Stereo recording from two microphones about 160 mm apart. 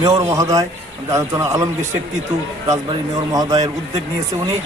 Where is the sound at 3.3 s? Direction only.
25° right (ahead or behind).